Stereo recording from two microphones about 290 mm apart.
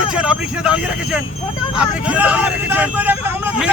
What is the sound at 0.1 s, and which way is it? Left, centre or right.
Speech, centre.